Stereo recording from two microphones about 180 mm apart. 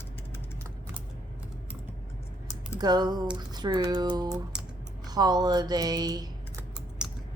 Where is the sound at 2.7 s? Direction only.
20° right (ahead or behind).